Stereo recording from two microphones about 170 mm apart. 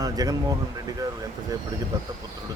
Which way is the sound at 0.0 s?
20° right (ahead or behind).